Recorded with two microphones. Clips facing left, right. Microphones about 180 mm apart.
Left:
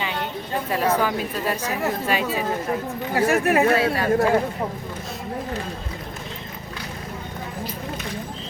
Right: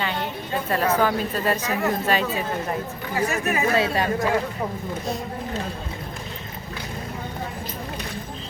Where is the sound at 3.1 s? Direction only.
60° left (ahead or behind).